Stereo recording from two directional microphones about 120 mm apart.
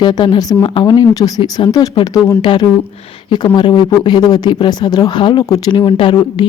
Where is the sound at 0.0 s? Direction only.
40° left (ahead or behind).